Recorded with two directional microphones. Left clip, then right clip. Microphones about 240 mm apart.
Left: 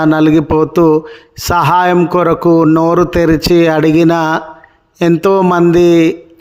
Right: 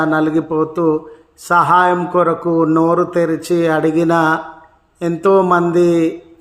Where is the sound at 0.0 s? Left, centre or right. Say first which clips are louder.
Left 5 dB; left.